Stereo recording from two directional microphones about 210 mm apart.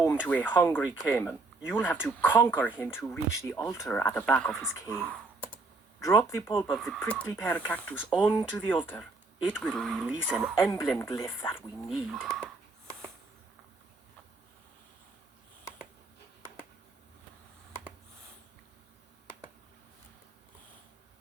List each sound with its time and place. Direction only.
0.0 s speech: 5° left (ahead or behind)
4.9 s computer keyboard: centre (ahead or behind)
6.0 s speech: 15° left (ahead or behind)
6.7 s speech: centre (ahead or behind)
10.6 s speech: 10° left (ahead or behind)
12.1 s speech: centre (ahead or behind)